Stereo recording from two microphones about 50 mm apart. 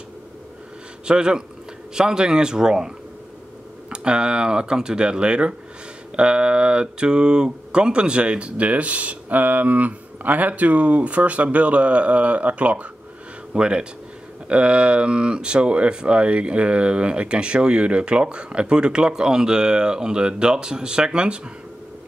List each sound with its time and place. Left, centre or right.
1.0 s speech: centre
3.9 s speech: centre